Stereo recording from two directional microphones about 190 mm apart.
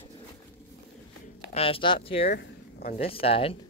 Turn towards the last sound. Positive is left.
turn(degrees=30)  # may be behind; listen again after turning